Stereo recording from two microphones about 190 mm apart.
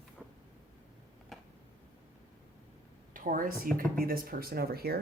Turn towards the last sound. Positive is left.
turn(degrees=-55)  # may be behind; listen again after turning